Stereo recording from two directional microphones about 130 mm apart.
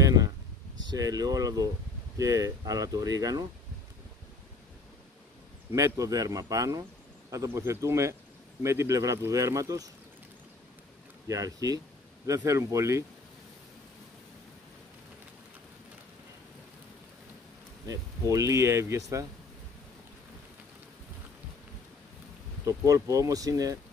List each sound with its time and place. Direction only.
0.0 s a sound: 25° right (ahead or behind)
0.8 s speech: 30° right (ahead or behind)
5.7 s speech: 25° right (ahead or behind)
11.2 s speech: 25° right (ahead or behind)
17.8 s speech: 25° right (ahead or behind)
22.7 s speech: 25° right (ahead or behind)